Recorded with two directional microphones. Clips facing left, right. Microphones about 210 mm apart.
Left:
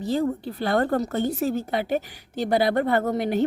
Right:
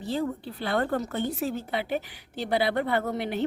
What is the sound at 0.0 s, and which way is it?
Speech, 45° left (ahead or behind).